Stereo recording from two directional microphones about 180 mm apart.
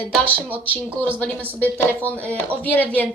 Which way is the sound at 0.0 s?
10° left (ahead or behind).